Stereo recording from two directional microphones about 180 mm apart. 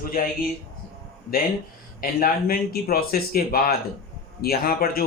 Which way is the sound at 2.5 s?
55° left (ahead or behind).